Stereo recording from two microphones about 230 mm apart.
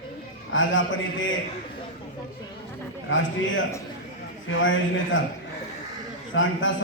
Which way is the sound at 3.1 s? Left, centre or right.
Left.